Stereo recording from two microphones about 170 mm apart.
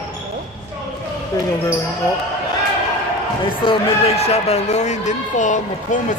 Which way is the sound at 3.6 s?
35° left (ahead or behind).